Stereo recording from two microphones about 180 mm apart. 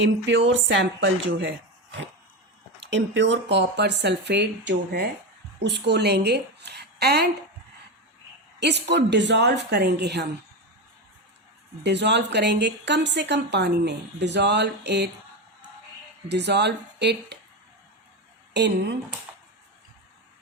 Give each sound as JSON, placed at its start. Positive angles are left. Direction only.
{"t": 0.0, "sound": "a woman's voice", "side_deg": -90}
{"t": 8.6, "sound": "a woman's voice", "side_deg": -70}
{"t": 11.8, "sound": "a woman's voice", "side_deg": -75}
{"t": 16.3, "sound": "a woman's voice", "side_deg": -70}
{"t": 18.5, "sound": "a woman's voice", "side_deg": -70}